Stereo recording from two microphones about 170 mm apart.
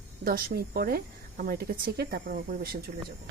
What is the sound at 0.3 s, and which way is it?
Speech, 60° right (ahead or behind).